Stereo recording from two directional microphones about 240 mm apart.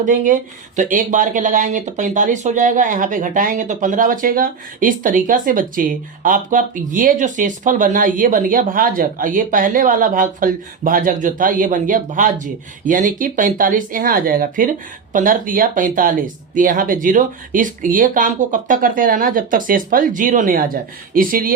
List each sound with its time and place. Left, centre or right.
0.0 s speech: right